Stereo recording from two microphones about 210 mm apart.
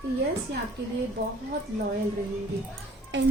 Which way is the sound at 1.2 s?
55° right (ahead or behind).